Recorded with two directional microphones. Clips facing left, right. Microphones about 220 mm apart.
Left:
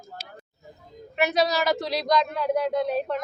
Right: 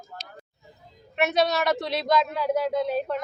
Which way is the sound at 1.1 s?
Centre (ahead or behind).